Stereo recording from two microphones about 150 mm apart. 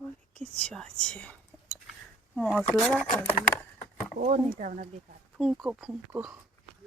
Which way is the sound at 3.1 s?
60° left (ahead or behind).